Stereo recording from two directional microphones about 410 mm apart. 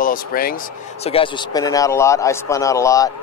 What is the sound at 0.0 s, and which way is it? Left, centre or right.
Speech, left.